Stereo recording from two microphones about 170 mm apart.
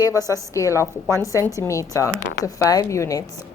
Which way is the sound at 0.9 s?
15° right (ahead or behind).